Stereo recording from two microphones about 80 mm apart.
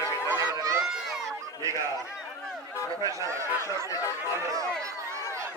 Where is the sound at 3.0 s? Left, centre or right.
Right.